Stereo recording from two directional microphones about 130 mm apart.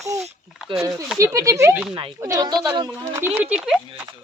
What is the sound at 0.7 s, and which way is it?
Speech, 40° right (ahead or behind).